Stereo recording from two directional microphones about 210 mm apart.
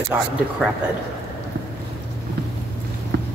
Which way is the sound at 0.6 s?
Centre (ahead or behind).